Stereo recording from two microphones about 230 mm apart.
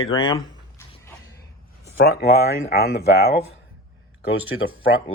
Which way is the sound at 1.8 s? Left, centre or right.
Left.